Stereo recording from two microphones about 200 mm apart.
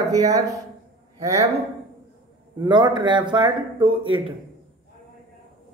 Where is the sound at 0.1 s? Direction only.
15° right (ahead or behind).